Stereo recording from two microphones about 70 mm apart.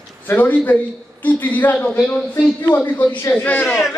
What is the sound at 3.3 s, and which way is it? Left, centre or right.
Speech, left.